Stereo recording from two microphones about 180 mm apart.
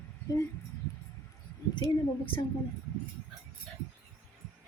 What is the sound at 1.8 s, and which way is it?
Speech, 25° left (ahead or behind).